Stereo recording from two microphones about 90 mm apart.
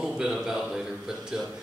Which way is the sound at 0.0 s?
5° right (ahead or behind).